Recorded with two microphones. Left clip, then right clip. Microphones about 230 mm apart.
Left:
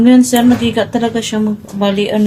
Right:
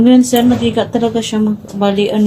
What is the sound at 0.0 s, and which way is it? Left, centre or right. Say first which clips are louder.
Speech: even; left.